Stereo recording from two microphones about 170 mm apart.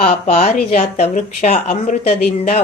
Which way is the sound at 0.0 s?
40° left (ahead or behind).